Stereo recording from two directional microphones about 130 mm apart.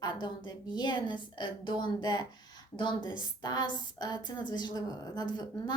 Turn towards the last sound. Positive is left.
turn(degrees=35)  # may be behind; listen again after turning